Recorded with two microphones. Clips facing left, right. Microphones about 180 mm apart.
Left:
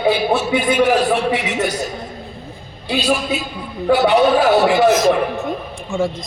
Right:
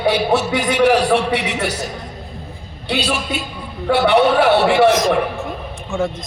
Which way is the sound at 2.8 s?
75° right (ahead or behind).